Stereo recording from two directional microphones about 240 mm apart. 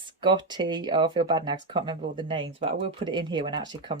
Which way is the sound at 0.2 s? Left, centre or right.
Centre.